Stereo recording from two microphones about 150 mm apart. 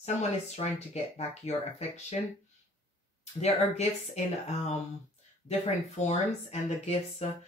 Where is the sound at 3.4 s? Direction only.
45° left (ahead or behind).